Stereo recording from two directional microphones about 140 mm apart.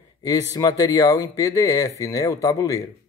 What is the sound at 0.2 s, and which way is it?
Speech, 25° left (ahead or behind).